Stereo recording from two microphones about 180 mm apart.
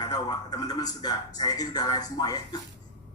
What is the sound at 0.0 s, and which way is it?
A man's voice, 25° left (ahead or behind).